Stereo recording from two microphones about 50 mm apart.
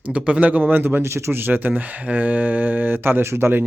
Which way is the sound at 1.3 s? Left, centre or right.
Right.